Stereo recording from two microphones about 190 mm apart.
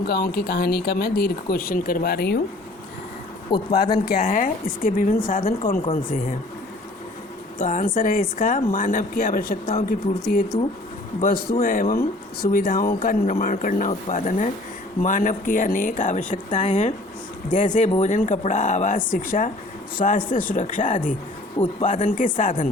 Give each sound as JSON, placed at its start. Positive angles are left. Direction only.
{"t": 0.0, "sound": "speech", "side_deg": 55}
{"t": 3.7, "sound": "speech", "side_deg": 55}
{"t": 4.2, "sound": "a woman's voice", "side_deg": 40}
{"t": 7.6, "sound": "a woman's voice", "side_deg": 45}